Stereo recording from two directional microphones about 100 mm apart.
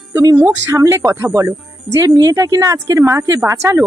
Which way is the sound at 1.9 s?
40° right (ahead or behind).